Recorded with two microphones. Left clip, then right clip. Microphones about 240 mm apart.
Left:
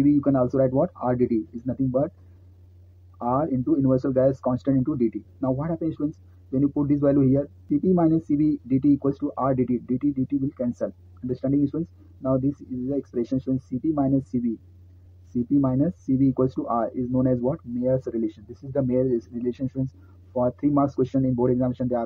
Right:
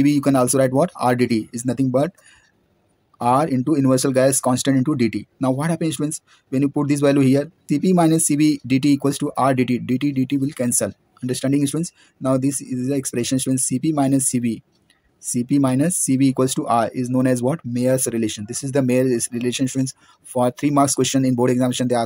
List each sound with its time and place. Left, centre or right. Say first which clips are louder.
0.0 s speech: right 4 dB; right
1.7 s speech: right 5 dB; right
3.2 s speech: right 7 dB; right
4.6 s speech: right 5 dB; right
8.1 s speech: right 5 dB; right
9.3 s speech: right 8 dB; right
13.2 s speech: right 5 dB; right
13.9 s speech: right 5 dB; right
15.5 s speech: right 4 dB; right
18.2 s speech: right 6 dB; right
18.8 s speech: right 5 dB; right
20.3 s speech: right 5 dB; right